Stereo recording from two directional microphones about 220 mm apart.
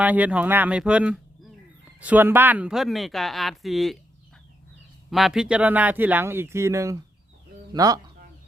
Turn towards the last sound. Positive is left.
turn(degrees=-15)  # may be behind; listen again after turning